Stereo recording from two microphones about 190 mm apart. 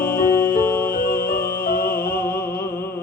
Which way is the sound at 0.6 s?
10° left (ahead or behind).